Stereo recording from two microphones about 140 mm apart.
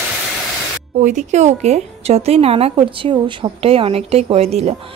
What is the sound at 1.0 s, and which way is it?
Speech, 55° right (ahead or behind).